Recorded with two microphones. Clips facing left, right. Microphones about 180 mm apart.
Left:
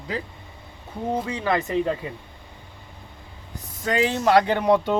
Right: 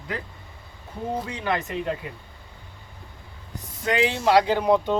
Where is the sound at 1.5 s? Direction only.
30° left (ahead or behind).